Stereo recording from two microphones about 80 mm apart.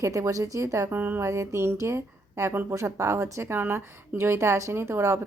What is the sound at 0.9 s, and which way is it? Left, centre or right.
Speech, right.